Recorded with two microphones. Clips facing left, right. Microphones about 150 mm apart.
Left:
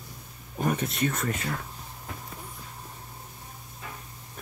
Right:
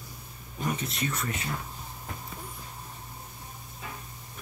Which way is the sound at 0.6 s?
50° left (ahead or behind).